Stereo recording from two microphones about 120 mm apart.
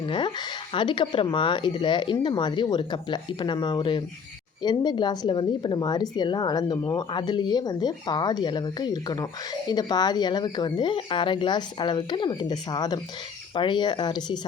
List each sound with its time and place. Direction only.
0.0 s speech: 40° left (ahead or behind)